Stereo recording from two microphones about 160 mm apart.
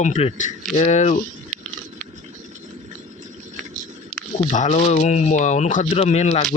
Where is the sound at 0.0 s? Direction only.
40° left (ahead or behind).